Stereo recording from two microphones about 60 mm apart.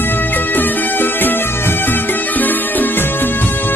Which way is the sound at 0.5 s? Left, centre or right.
Left.